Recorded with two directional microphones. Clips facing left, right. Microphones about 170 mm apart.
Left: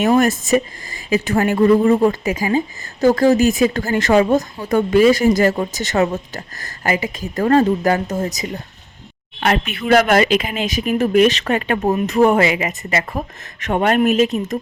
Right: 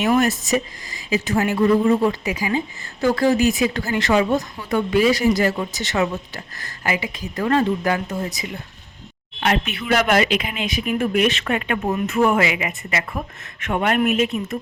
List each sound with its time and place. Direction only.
0.1 s speech: 50° left (ahead or behind)